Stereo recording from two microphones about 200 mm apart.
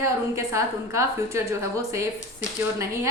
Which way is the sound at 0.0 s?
15° right (ahead or behind).